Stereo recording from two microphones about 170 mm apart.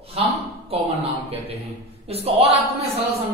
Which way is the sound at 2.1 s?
35° right (ahead or behind).